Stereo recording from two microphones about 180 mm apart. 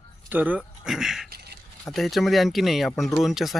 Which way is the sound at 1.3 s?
65° right (ahead or behind).